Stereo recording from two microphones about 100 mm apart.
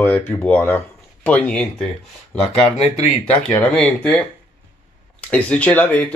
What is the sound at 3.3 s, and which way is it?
Speech, 10° left (ahead or behind).